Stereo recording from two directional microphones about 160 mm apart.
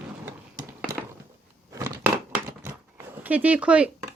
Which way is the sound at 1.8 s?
15° right (ahead or behind).